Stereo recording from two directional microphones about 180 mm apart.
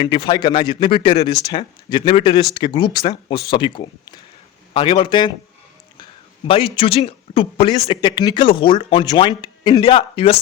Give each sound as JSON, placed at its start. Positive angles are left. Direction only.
{"t": 0.0, "sound": "a man's voice", "side_deg": 25}
{"t": 6.7, "sound": "a man's voice", "side_deg": 30}